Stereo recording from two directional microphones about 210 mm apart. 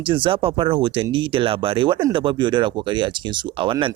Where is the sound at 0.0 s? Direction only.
25° right (ahead or behind).